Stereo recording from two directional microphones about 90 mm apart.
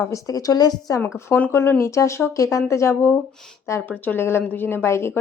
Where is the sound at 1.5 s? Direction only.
30° left (ahead or behind).